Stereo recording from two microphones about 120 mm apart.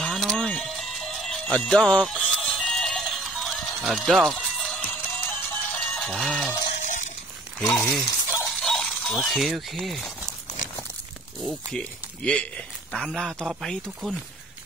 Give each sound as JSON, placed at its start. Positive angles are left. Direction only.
{"t": 0.0, "sound": "music", "side_deg": 0}
{"t": 6.8, "sound": "stir", "side_deg": 90}
{"t": 7.7, "sound": "speech", "side_deg": 5}
{"t": 8.5, "sound": "mechanisms", "side_deg": 5}
{"t": 11.7, "sound": "speech", "side_deg": 10}